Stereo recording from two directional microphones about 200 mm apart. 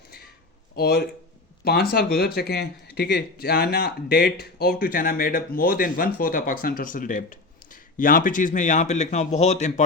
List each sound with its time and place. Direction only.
0.8 s speech: 50° left (ahead or behind); by 9.8 s 35° left (ahead or behind)